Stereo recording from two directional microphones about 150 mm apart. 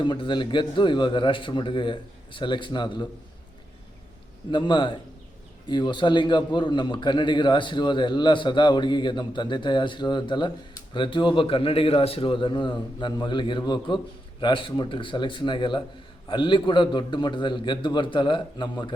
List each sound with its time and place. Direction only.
0.0 s a man's voice: 30° left (ahead or behind)
4.5 s a man's voice: 30° left (ahead or behind)